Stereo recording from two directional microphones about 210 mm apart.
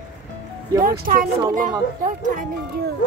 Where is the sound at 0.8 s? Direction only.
40° right (ahead or behind).